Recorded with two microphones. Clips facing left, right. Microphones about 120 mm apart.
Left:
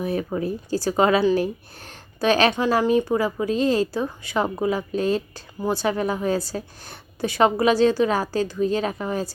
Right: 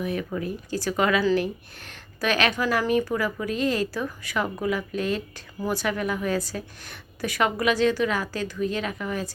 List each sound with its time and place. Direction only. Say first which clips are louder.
0.0 s a woman's voice: left 4 dB; 35° left (ahead or behind)